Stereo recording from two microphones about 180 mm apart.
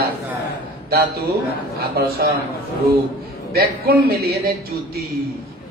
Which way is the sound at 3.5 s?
55° right (ahead or behind).